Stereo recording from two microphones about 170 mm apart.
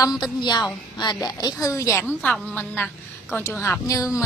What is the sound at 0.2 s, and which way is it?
A woman's voice, 25° left (ahead or behind).